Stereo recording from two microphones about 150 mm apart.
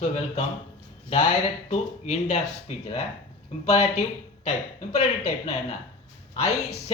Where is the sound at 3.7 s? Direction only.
50° left (ahead or behind).